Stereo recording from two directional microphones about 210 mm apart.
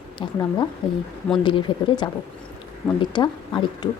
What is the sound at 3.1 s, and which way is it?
Speech, 20° left (ahead or behind).